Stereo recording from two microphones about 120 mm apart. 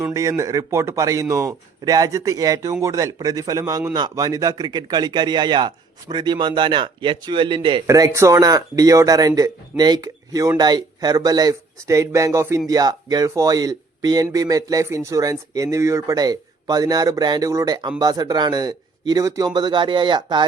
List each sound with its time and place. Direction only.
0.0 s speech: 25° right (ahead or behind); by 7.9 s 40° right (ahead or behind)
7.9 s speech: 25° right (ahead or behind)